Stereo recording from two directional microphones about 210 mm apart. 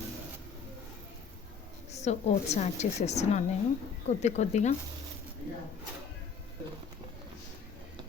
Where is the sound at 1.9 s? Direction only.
30° left (ahead or behind).